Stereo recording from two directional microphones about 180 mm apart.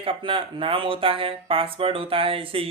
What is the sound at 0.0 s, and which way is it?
Speech, 30° right (ahead or behind).